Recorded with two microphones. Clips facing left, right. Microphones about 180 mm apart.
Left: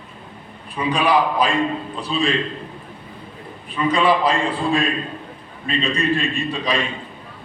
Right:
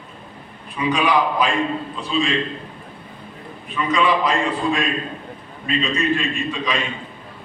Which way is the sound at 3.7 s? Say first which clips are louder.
Left 2 dB; 35° left (ahead or behind).